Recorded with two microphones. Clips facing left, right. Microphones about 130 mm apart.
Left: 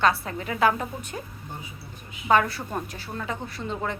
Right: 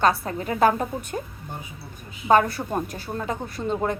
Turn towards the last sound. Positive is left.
turn(degrees=-45)  # may be behind; listen again after turning